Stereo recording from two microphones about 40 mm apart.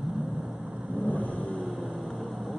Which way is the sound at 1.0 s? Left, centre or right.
Left.